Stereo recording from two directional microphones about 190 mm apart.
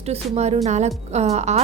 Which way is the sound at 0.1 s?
35° right (ahead or behind).